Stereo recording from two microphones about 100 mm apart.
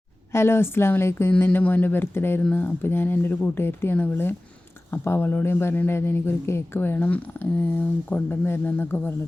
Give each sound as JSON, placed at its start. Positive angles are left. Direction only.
{"t": 0.3, "sound": "speech", "side_deg": 25}